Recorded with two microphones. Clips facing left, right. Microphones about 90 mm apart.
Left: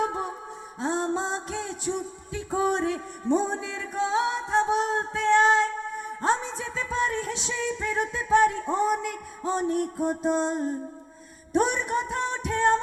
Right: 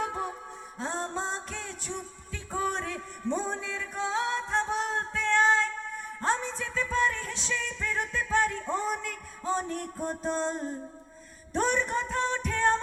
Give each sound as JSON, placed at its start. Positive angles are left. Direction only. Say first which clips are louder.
{"t": 0.0, "sound": "music", "louder": "left 4 dB", "side_deg": 20}